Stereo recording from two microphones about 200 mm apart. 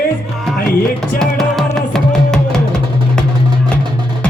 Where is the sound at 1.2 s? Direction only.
Centre (ahead or behind).